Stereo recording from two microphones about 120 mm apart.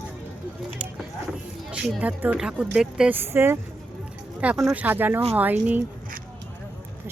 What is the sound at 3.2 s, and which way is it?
Speech, 20° right (ahead or behind).